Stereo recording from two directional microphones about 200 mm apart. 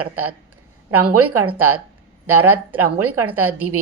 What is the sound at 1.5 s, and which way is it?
A woman's voice, 90° right.